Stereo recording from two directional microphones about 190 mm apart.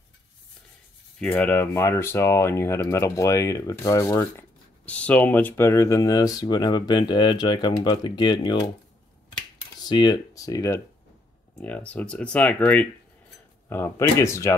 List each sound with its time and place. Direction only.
1.2 s speech: 5° left (ahead or behind); by 8.6 s 25° left (ahead or behind)
9.8 s speech: 20° left (ahead or behind)